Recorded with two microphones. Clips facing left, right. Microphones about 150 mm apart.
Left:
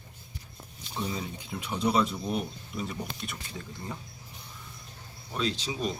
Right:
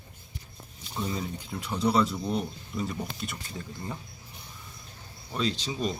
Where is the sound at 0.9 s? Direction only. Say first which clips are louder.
Right 2 dB; centre (ahead or behind).